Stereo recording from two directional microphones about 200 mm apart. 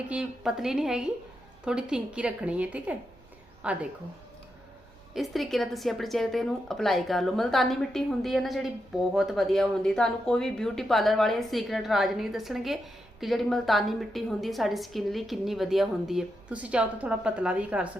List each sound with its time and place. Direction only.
0.1 s a woman's voice: 5° right (ahead or behind)
5.1 s speech: centre (ahead or behind)